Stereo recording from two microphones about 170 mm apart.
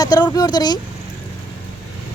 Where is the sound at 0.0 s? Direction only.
20° left (ahead or behind).